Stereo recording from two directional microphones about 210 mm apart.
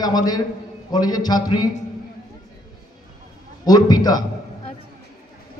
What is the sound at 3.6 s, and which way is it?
Speech, 20° left (ahead or behind).